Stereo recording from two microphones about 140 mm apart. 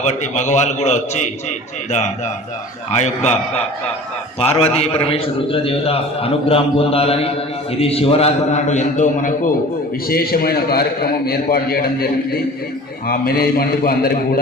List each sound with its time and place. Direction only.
0.0 s a man's voice: 55° left (ahead or behind)
4.4 s a man's voice: 45° left (ahead or behind); by 9.5 s 65° left (ahead or behind)
10.1 s a man's voice: 90° left